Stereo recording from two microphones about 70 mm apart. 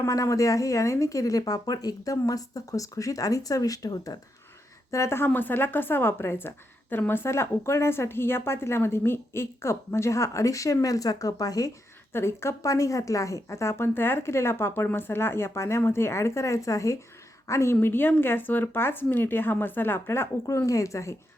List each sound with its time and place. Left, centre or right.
0.0 s speech: left
4.9 s speech: left
12.1 s speech: left
12.6 s a woman's voice: left
17.7 s speech: left
20.5 s speech: left